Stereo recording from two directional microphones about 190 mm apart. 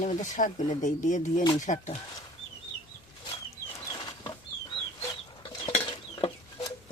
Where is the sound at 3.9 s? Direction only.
25° left (ahead or behind).